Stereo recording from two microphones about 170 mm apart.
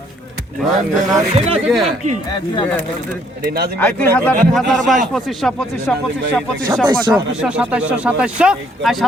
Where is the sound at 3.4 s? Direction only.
65° right (ahead or behind).